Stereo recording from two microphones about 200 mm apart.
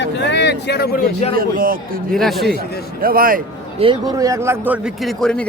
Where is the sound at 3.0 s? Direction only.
45° right (ahead or behind).